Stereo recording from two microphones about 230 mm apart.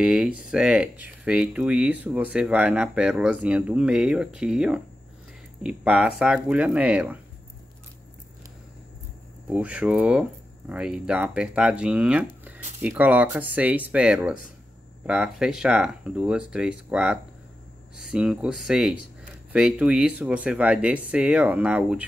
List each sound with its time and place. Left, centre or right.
0.0 s speech: centre
9.5 s speech: centre